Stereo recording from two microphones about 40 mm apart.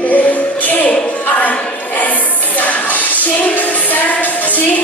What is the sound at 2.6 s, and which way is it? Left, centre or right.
Music, left.